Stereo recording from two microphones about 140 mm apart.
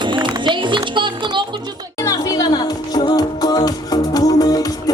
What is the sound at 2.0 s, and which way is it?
Music, 25° left (ahead or behind).